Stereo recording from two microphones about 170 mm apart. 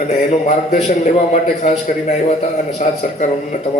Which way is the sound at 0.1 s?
45° left (ahead or behind).